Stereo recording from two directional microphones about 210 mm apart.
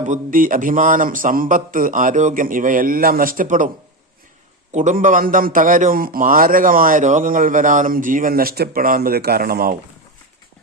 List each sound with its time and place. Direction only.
0.0 s a man's voice: 40° right (ahead or behind)
4.7 s a man's voice: 35° right (ahead or behind)